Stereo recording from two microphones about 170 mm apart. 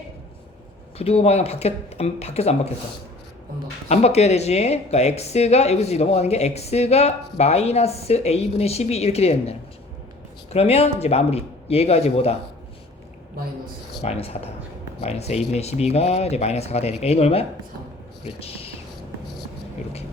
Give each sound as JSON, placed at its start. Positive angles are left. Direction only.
{"t": 0.9, "sound": "speech", "side_deg": 35}
{"t": 3.8, "sound": "speech", "side_deg": 40}
{"t": 14.0, "sound": "speech", "side_deg": 35}